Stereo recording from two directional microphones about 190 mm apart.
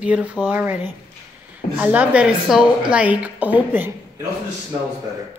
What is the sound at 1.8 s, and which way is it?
A woman's voice, 5° right (ahead or behind).